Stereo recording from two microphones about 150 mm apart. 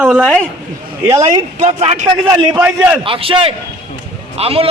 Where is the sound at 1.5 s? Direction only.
45° right (ahead or behind).